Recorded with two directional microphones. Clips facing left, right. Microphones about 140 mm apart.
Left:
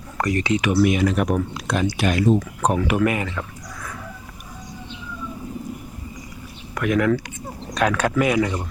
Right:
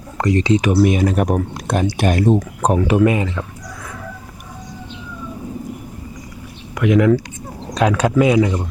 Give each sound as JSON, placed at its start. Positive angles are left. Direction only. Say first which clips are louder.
{"t": 0.2, "sound": "speech", "louder": "right 5 dB", "side_deg": -25}
{"t": 2.3, "sound": "speech", "louder": "right 3 dB", "side_deg": -30}
{"t": 6.7, "sound": "speech", "louder": "right 6 dB", "side_deg": -20}